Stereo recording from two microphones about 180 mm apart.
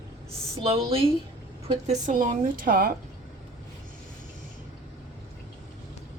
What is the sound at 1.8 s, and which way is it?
A woman's voice, 40° right (ahead or behind).